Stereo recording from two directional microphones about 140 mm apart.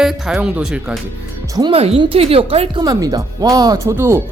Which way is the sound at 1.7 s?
45° right (ahead or behind).